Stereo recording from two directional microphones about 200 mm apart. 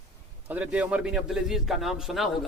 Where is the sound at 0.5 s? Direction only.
5° right (ahead or behind).